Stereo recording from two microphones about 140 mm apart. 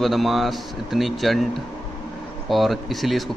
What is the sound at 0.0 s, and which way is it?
Speech, centre (ahead or behind).